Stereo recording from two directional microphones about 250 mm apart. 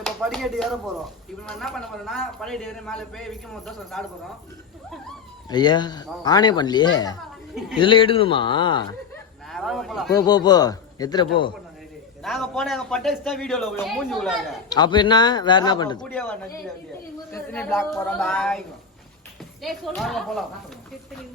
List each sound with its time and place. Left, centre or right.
0.0 s a man's voice: centre
5.5 s a man's voice: centre
9.5 s speech: centre
10.2 s speech: centre
12.2 s a man's voice: centre
14.7 s speech: centre
16.0 s a man's voice: centre
19.6 s a man's voice: centre